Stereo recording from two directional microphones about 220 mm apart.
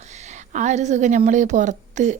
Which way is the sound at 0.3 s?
30° right (ahead or behind).